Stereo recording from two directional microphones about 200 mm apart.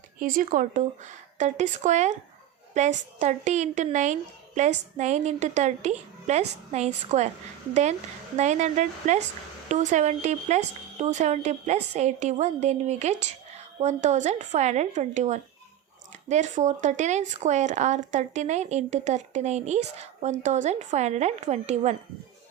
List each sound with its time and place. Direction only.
0.2 s speech: 45° right (ahead or behind)